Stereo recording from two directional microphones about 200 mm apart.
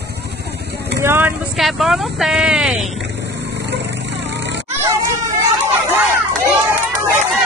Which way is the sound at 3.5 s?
60° right (ahead or behind).